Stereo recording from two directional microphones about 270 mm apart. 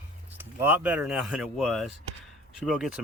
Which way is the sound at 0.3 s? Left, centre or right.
Centre.